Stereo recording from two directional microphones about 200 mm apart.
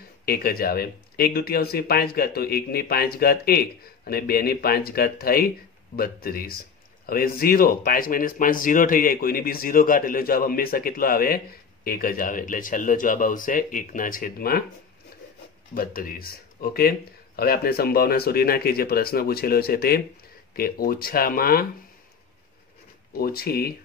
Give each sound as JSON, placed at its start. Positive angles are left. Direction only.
{"t": 0.2, "sound": "speech", "side_deg": 50}
{"t": 15.7, "sound": "speech", "side_deg": 45}
{"t": 23.1, "sound": "speech", "side_deg": 50}